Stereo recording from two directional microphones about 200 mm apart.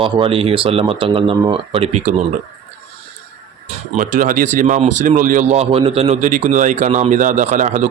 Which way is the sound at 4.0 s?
40° right (ahead or behind).